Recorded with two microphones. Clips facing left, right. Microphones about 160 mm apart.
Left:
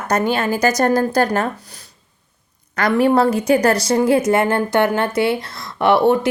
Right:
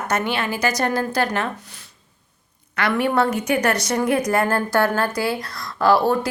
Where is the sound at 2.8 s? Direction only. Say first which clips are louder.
Left 5 dB; 40° left (ahead or behind).